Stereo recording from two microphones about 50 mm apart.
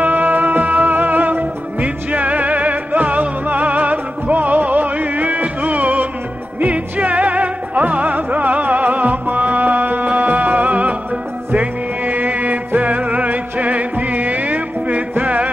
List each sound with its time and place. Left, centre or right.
0.0 s music: right